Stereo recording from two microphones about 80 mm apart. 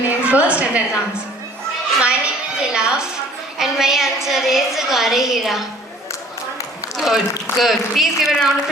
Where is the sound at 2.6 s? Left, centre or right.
Centre.